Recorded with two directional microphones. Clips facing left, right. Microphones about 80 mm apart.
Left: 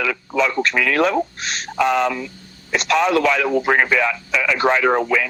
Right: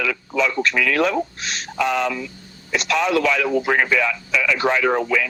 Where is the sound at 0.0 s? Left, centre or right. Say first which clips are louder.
Left 2 dB; left.